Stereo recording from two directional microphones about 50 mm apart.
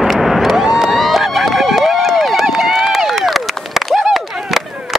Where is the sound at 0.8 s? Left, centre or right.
Centre.